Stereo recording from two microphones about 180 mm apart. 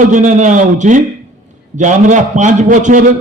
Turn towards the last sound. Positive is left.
turn(degrees=-45)  # may be behind; listen again after turning